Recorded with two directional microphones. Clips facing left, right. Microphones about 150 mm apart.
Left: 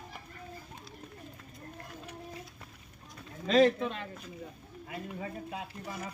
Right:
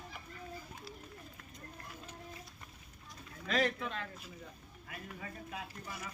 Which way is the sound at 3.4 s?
25° left (ahead or behind).